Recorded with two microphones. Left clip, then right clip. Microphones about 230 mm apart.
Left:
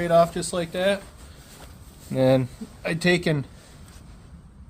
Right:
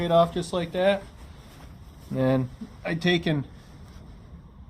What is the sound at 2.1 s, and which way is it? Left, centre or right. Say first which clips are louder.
Speech: left 5 dB; left.